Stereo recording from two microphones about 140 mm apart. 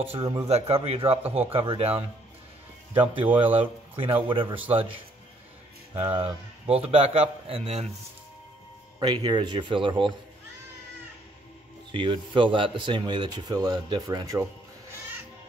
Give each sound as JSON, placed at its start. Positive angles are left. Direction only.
{"t": 0.2, "sound": "speech", "side_deg": -30}
{"t": 0.5, "sound": "a man's voice", "side_deg": -45}
{"t": 3.3, "sound": "speech", "side_deg": -10}
{"t": 3.5, "sound": "a man's voice", "side_deg": -35}
{"t": 9.0, "sound": "speech", "side_deg": -30}
{"t": 11.9, "sound": "speech", "side_deg": -35}